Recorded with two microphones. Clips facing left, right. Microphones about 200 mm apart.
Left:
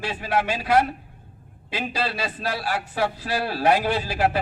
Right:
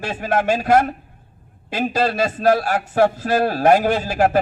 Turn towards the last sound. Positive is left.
turn(degrees=-45)  # may be behind; listen again after turning